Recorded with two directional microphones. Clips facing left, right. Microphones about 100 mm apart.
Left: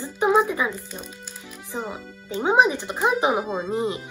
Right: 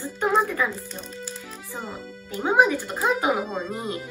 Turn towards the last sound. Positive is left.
turn(degrees=20)  # may be behind; listen again after turning